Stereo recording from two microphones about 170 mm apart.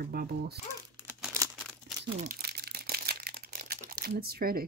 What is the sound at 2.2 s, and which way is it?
Crumpling, 60° right (ahead or behind).